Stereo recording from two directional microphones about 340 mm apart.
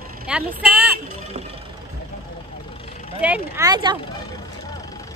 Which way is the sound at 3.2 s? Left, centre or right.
Centre.